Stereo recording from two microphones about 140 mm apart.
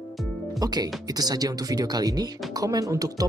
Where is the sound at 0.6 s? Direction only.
30° right (ahead or behind).